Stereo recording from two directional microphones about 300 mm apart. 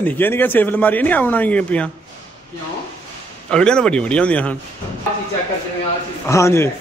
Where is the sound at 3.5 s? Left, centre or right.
Centre.